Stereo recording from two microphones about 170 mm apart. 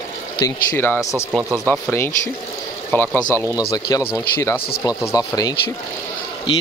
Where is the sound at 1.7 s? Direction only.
15° left (ahead or behind).